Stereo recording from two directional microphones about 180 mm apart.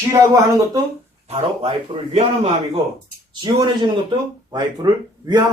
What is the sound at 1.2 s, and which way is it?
Speech, 35° right (ahead or behind).